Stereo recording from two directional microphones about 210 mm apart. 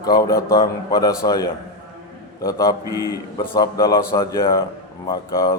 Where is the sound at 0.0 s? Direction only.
20° left (ahead or behind).